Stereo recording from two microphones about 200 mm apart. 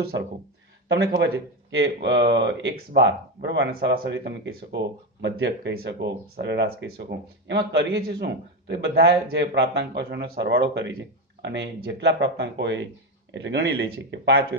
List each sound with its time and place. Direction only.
0.8 s speech: 65° right (ahead or behind)